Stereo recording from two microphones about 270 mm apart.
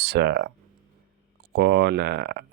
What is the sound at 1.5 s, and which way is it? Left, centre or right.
Speech, right.